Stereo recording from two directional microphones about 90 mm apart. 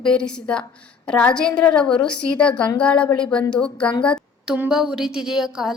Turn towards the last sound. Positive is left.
turn(degrees=-5)  # may be behind; listen again after turning